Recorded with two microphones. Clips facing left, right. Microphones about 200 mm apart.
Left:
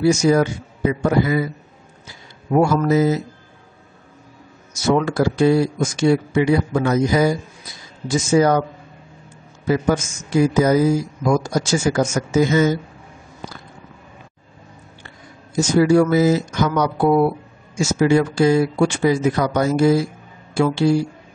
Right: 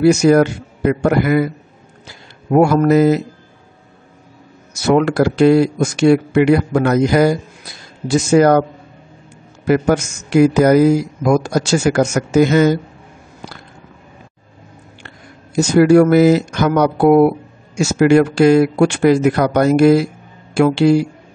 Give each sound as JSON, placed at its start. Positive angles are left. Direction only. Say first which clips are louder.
{"t": 0.0, "sound": "speech", "louder": "right 5 dB", "side_deg": -65}
{"t": 2.5, "sound": "speech", "louder": "right 5 dB", "side_deg": -60}
{"t": 4.8, "sound": "speech", "louder": "right 4 dB", "side_deg": -70}
{"t": 9.7, "sound": "speech", "louder": "right 4 dB", "side_deg": -70}
{"t": 15.0, "sound": "speech", "louder": "right 3 dB", "side_deg": -65}